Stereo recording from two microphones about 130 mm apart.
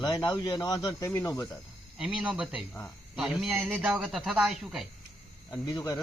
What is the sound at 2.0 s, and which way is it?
Speech, 5° right (ahead or behind).